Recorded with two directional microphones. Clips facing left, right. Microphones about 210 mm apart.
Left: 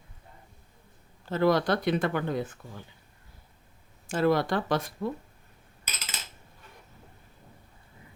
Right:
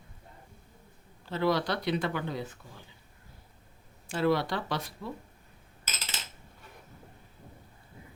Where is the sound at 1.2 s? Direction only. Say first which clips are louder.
Left 4 dB; 50° left (ahead or behind).